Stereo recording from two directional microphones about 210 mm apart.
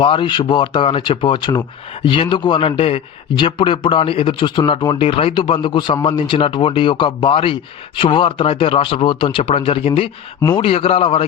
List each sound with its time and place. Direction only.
0.0 s a man's voice: 25° left (ahead or behind)